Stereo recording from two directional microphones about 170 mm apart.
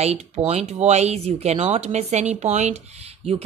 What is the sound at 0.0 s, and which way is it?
Speech, 40° right (ahead or behind).